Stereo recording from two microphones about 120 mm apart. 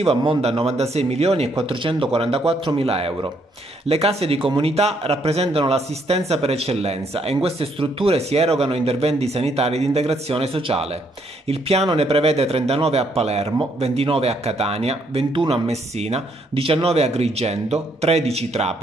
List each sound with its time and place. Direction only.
0.4 s speech: 60° right (ahead or behind)
1.7 s speech: 45° right (ahead or behind); by 18.8 s 60° right (ahead or behind)